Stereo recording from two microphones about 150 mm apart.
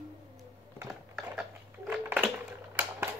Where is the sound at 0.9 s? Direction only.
5° right (ahead or behind).